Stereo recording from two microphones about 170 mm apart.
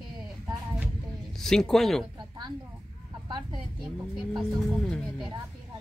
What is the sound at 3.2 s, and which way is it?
Speech, 25° right (ahead or behind).